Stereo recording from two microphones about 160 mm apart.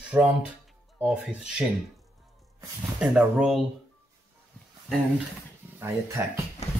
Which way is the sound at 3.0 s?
5° right (ahead or behind).